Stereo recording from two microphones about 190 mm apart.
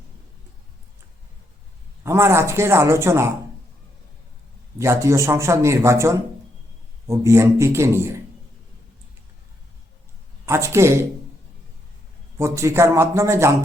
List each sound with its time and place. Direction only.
2.0 s speech: 15° right (ahead or behind)
4.8 s speech: 15° right (ahead or behind)
10.4 s speech: 15° right (ahead or behind)
12.4 s speech: 15° right (ahead or behind)